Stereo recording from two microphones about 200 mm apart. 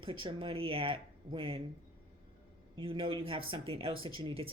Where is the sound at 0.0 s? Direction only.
25° right (ahead or behind).